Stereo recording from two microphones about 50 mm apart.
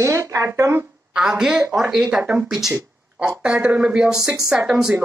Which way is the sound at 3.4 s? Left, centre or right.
Right.